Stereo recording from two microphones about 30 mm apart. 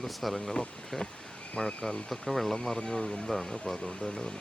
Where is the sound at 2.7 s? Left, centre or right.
Centre.